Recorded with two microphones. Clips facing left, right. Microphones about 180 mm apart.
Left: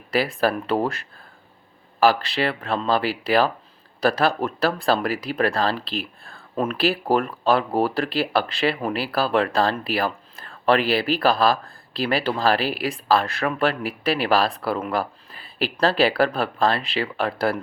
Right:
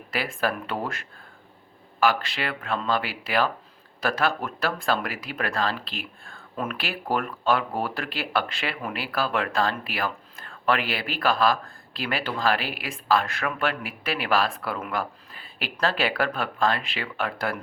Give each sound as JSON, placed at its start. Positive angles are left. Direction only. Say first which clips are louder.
{"t": 0.1, "sound": "speech", "louder": "left 6 dB", "side_deg": 35}